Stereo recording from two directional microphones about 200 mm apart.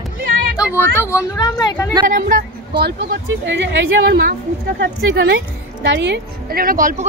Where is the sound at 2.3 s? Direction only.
50° right (ahead or behind).